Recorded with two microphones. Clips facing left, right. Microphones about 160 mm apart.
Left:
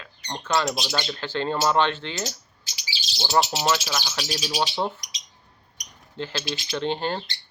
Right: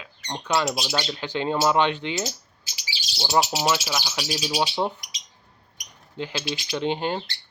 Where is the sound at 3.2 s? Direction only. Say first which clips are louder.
Even; 15° right (ahead or behind).